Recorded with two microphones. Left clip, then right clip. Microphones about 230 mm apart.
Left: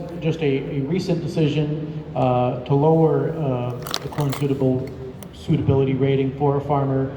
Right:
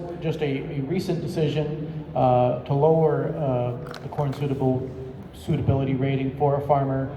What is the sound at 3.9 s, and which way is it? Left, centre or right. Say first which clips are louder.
Speech: left 4 dB; left.